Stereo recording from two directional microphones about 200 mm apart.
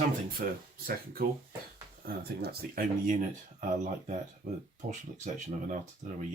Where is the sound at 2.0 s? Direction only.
50° right (ahead or behind).